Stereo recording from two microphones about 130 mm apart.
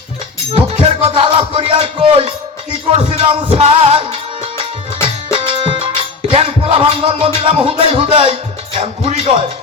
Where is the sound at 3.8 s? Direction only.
50° right (ahead or behind).